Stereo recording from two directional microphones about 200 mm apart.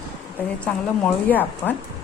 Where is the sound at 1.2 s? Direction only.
10° left (ahead or behind).